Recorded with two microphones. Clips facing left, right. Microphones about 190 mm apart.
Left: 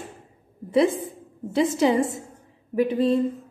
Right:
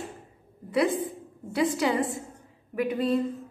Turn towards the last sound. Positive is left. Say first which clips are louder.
# left 5 dB
turn(degrees=25)  # may be behind; listen again after turning